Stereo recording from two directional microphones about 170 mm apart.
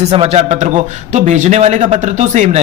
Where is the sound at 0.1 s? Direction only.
35° right (ahead or behind).